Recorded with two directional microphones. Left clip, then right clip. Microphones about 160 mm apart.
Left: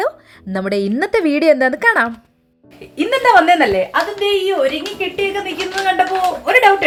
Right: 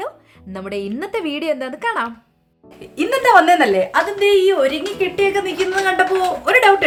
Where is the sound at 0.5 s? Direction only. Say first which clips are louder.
Left 7 dB; 40° left (ahead or behind).